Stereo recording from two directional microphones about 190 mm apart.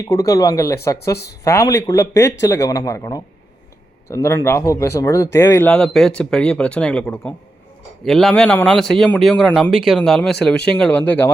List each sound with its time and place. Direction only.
0.0 s speech: 15° left (ahead or behind)